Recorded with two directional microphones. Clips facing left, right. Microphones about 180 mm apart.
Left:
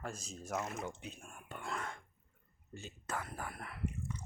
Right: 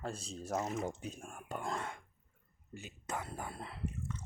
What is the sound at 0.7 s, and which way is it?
Speech, 45° right (ahead or behind).